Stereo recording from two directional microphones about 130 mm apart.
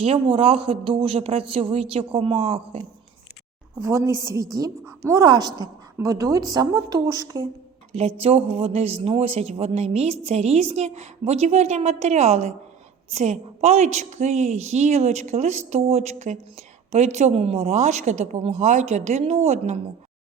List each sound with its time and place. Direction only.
0.0 s speech: 50° right (ahead or behind)
3.8 s a woman's voice: 25° right (ahead or behind)
8.2 s a woman's voice: 50° right (ahead or behind)